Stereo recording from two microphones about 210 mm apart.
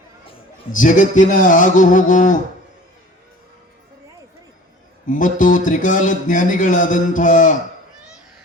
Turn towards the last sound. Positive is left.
turn(degrees=40)  # may be behind; listen again after turning